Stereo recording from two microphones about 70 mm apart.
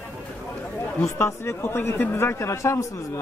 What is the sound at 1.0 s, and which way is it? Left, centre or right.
A man's voice, left.